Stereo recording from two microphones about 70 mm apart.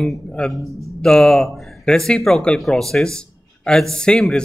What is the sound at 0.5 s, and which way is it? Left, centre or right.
Speech, centre.